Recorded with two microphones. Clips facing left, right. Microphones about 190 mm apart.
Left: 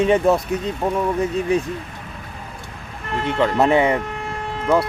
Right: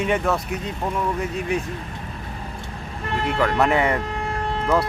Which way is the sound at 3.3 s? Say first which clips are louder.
Left 4 dB; 30° left (ahead or behind).